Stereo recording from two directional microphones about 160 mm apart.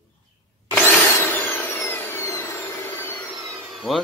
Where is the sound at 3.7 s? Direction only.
Centre (ahead or behind).